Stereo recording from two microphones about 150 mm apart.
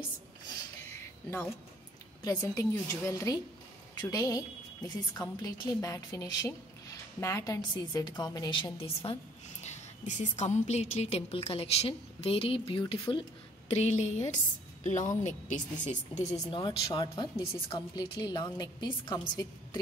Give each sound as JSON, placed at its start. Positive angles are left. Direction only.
{"t": 2.2, "sound": "a woman's voice", "side_deg": 20}
{"t": 13.7, "sound": "a woman's voice", "side_deg": 50}
{"t": 16.3, "sound": "a woman's voice", "side_deg": 30}